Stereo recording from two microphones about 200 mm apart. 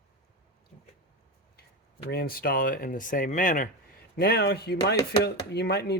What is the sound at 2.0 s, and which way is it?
Speech, 50° left (ahead or behind).